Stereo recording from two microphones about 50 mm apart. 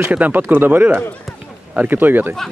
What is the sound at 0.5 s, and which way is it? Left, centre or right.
Speech, right.